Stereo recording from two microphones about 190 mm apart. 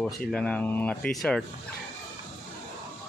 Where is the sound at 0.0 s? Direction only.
5° left (ahead or behind).